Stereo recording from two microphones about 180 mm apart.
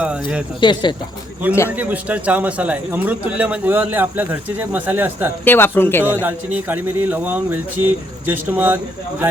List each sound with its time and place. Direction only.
0.0 s speech: 5° right (ahead or behind)
0.6 s speech: 25° left (ahead or behind)
1.7 s a man's voice: 10° right (ahead or behind)
5.5 s speech: 10° left (ahead or behind)
6.2 s a man's voice: 10° right (ahead or behind)